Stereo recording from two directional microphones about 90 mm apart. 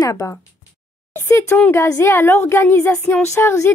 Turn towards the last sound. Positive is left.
turn(degrees=30)  # may be behind; listen again after turning